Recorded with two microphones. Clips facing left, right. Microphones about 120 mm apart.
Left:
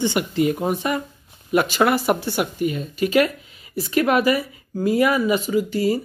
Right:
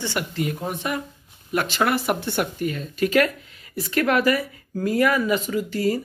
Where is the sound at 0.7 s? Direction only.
Centre (ahead or behind).